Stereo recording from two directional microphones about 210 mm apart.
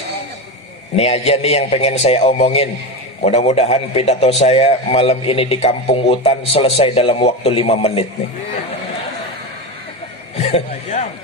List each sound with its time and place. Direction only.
0.9 s a man's voice: 30° left (ahead or behind)
10.3 s chuckle: 30° left (ahead or behind)